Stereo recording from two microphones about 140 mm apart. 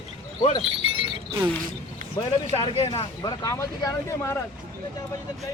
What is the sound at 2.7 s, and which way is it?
Speech, 45° left (ahead or behind).